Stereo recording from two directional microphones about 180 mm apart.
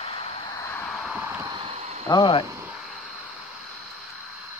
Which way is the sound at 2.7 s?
Centre (ahead or behind).